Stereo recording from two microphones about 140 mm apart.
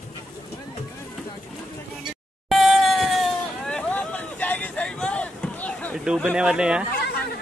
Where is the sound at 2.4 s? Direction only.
Centre (ahead or behind).